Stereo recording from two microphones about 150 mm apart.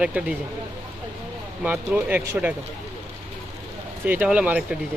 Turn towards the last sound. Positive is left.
turn(degrees=-10)  # may be behind; listen again after turning